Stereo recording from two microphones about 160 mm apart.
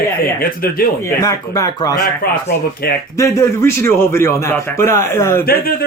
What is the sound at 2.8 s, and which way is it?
Speech, 75° left (ahead or behind).